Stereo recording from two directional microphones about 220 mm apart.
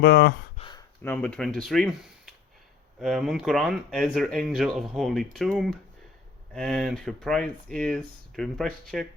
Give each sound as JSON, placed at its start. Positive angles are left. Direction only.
{"t": 0.0, "sound": "speech", "side_deg": 50}
{"t": 0.5, "sound": "speech", "side_deg": 20}